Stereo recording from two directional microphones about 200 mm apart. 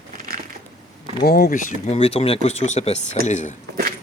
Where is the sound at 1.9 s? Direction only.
30° left (ahead or behind).